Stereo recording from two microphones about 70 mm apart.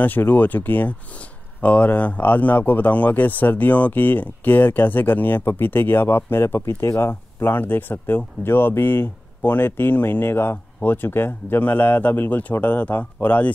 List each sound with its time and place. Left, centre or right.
0.0 s speech: left